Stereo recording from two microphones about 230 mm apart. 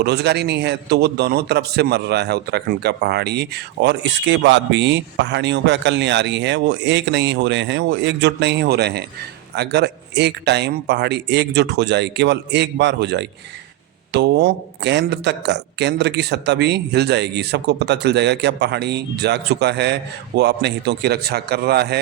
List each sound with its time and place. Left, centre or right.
0.0 s a man's voice: right